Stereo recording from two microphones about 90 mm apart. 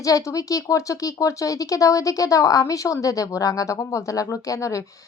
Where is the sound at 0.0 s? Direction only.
35° left (ahead or behind).